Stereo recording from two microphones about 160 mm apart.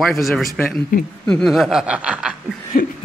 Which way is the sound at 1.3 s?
Centre (ahead or behind).